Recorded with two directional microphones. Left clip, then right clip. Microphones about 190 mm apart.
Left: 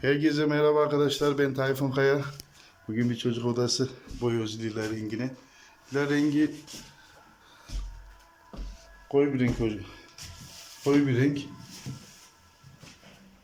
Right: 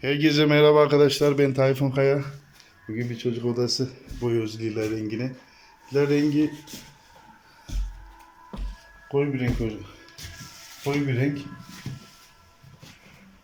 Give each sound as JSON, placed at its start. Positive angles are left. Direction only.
{"t": 0.0, "sound": "a man's voice", "side_deg": 0}
{"t": 9.1, "sound": "speech", "side_deg": 0}
{"t": 10.8, "sound": "speech", "side_deg": 0}